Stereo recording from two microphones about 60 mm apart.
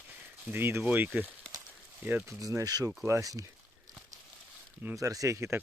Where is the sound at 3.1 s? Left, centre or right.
Right.